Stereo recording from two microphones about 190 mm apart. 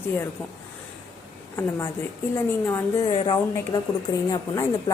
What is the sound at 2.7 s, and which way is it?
A woman's voice, 25° left (ahead or behind).